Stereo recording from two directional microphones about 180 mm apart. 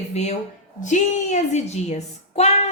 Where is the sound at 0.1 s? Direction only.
35° left (ahead or behind).